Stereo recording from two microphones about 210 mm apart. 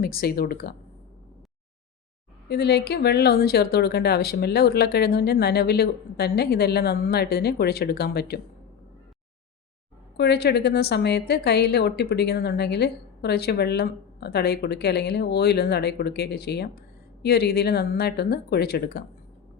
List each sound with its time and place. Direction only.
0.0 s a woman's voice: 45° left (ahead or behind)
2.5 s a woman's voice: 50° left (ahead or behind)
10.2 s a woman's voice: 50° left (ahead or behind)